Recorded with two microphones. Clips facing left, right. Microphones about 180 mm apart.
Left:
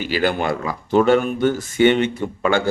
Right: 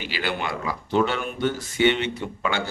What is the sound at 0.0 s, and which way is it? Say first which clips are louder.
A man's voice: left 8 dB; 45° left (ahead or behind).